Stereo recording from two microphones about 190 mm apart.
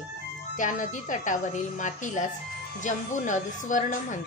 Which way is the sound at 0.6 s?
40° left (ahead or behind).